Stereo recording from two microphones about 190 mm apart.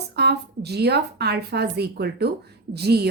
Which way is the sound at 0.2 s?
60° right (ahead or behind).